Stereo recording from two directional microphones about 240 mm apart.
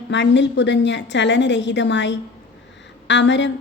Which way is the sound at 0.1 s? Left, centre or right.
Left.